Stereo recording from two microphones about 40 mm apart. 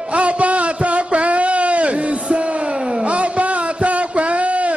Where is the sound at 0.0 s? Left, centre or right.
Right.